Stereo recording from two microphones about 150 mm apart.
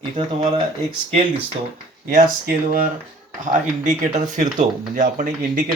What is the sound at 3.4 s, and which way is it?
Speech, 55° right (ahead or behind).